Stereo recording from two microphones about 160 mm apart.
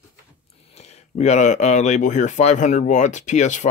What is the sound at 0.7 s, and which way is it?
Speech, 40° left (ahead or behind).